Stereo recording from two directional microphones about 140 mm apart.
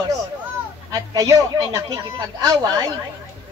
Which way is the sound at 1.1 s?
25° right (ahead or behind).